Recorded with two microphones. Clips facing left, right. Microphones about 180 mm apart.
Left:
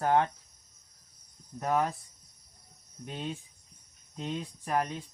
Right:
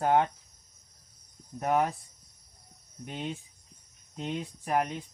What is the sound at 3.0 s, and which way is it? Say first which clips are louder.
Speech: right 1 dB; 15° right (ahead or behind).